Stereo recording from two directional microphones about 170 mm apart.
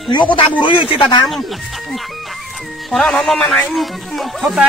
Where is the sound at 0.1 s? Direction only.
30° left (ahead or behind).